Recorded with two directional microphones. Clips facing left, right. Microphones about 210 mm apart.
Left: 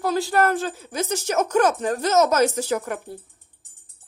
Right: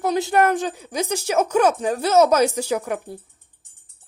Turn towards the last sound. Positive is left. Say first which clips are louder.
# right 1 dB
turn(degrees=-15)  # may be behind; listen again after turning